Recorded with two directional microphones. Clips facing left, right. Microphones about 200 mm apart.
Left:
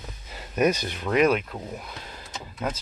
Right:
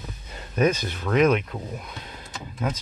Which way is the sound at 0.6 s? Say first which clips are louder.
Right 1 dB; 10° left (ahead or behind).